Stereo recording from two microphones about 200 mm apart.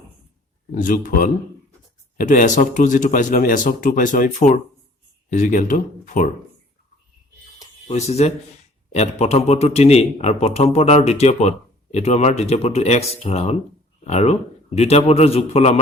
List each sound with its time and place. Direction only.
0.7 s a man's voice: 40° left (ahead or behind)
7.9 s a man's voice: 35° left (ahead or behind)